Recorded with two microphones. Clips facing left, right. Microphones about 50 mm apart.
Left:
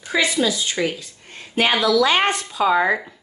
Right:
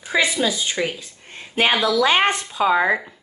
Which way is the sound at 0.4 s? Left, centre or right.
Right.